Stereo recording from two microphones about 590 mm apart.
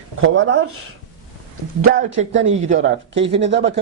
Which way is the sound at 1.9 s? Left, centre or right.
Centre.